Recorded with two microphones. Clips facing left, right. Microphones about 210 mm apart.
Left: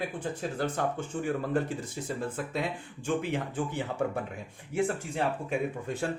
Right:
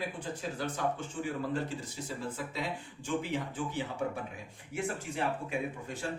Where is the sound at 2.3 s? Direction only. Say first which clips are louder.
Left 4 dB; 55° left (ahead or behind).